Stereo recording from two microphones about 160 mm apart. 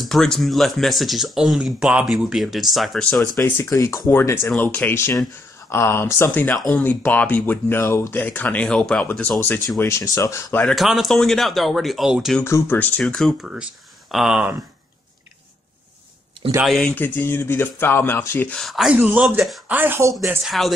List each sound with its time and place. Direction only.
0.0 s speech: centre (ahead or behind)
3.3 s speech: 15° left (ahead or behind)
10.6 s speech: centre (ahead or behind)
12.4 s speech: 15° left (ahead or behind); by 14.6 s 5° right (ahead or behind)
16.6 s speech: 5° left (ahead or behind)
19.7 s speech: 10° right (ahead or behind)
20.2 s speech: centre (ahead or behind)